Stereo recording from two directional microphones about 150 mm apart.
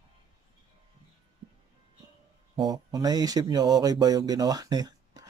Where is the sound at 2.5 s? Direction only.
25° right (ahead or behind).